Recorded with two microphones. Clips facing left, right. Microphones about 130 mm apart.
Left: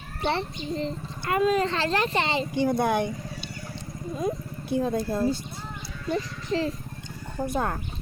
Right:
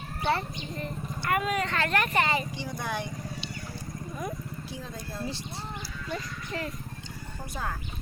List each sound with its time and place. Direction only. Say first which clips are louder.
0.3 s speech: left 2 dB; 25° left (ahead or behind)
2.6 s speech: left 11 dB; 55° left (ahead or behind)
4.1 s speech: left 8 dB; 25° left (ahead or behind)
4.7 s speech: left 18 dB; 55° left (ahead or behind)
6.1 s speech: left 9 dB; 30° left (ahead or behind)
7.3 s speech: left 9 dB; 55° left (ahead or behind)